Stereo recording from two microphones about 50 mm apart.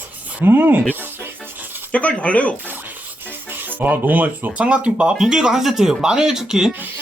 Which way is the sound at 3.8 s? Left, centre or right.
Right.